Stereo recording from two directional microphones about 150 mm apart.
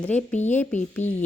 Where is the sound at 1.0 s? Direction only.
50° left (ahead or behind).